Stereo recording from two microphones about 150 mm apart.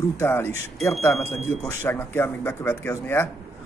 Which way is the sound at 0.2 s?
15° left (ahead or behind).